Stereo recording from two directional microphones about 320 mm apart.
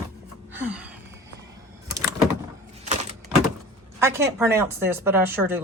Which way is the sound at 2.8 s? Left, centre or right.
Right.